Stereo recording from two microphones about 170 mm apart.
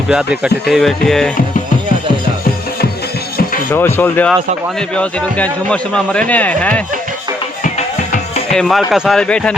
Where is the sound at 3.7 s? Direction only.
15° left (ahead or behind).